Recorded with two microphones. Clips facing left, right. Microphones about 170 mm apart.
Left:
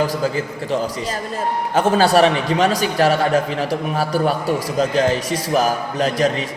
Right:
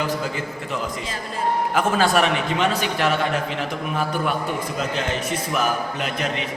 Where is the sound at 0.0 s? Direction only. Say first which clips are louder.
Left 5 dB; 35° left (ahead or behind).